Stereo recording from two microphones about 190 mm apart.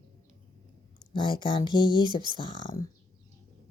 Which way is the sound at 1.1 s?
25° left (ahead or behind).